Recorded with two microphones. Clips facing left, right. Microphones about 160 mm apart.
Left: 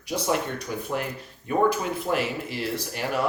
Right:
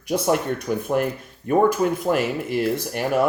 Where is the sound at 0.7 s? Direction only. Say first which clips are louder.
Right 10 dB; 50° right (ahead or behind).